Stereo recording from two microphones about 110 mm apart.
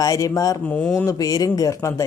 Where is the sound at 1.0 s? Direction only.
35° left (ahead or behind).